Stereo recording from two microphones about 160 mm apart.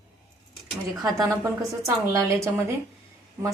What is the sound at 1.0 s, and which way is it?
A woman's voice, 20° right (ahead or behind).